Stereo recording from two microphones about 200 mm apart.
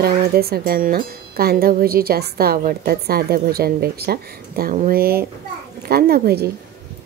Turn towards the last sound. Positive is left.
turn(degrees=-50)  # may be behind; listen again after turning